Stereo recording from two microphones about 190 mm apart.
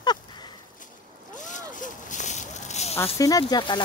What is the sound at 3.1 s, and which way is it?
Speech, 20° left (ahead or behind).